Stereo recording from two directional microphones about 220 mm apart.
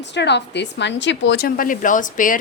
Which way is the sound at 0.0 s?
50° left (ahead or behind).